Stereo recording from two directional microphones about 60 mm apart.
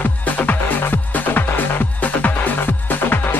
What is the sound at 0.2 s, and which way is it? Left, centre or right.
Music, left.